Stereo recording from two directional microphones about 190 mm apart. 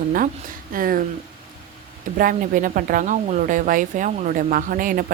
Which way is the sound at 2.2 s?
45° right (ahead or behind).